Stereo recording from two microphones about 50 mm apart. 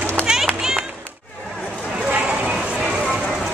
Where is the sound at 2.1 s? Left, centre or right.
Right.